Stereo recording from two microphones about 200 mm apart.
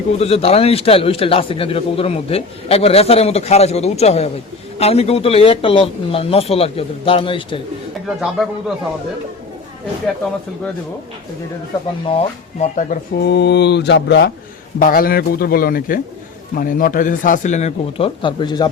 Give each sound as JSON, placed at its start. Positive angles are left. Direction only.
{"t": 0.2, "sound": "a man's voice", "side_deg": 30}
{"t": 8.0, "sound": "a man's voice", "side_deg": 0}
{"t": 12.1, "sound": "a man's voice", "side_deg": 35}
{"t": 13.2, "sound": "mantra", "side_deg": 60}
{"t": 14.8, "sound": "a man's voice", "side_deg": 45}